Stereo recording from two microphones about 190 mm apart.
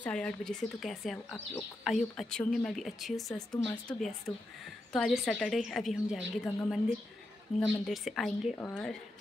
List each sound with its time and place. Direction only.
0.0 s speech: 5° left (ahead or behind)
3.5 s a woman's voice: 15° left (ahead or behind)